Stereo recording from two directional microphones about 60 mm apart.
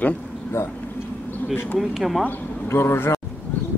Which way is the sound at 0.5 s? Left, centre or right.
Left.